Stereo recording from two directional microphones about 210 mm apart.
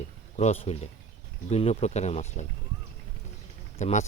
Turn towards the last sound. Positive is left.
turn(degrees=35)  # may be behind; listen again after turning